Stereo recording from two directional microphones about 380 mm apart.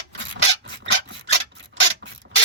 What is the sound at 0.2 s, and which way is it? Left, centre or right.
Rub, right.